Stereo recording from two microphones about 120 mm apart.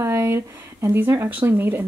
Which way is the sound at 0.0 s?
20° right (ahead or behind).